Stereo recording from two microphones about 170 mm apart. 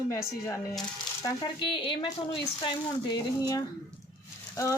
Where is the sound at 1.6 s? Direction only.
30° left (ahead or behind).